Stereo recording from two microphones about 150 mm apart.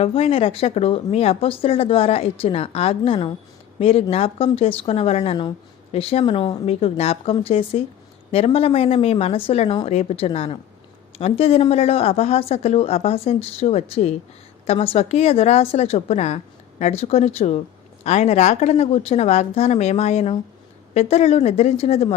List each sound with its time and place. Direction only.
0.0 s speech: 40° left (ahead or behind)